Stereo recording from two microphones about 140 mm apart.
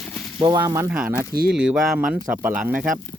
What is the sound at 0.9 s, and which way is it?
Speech, 10° right (ahead or behind).